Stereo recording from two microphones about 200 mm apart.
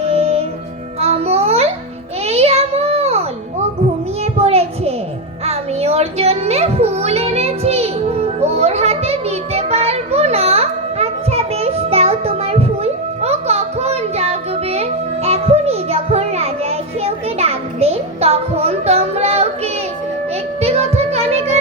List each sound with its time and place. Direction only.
0.0 s music: 30° right (ahead or behind)
0.9 s babbling: 30° right (ahead or behind)
2.2 s a sound: 30° right (ahead or behind)
5.5 s music: 30° right (ahead or behind)